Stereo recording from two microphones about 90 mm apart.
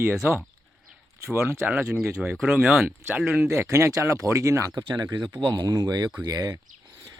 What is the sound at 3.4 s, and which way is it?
Speech, 30° right (ahead or behind).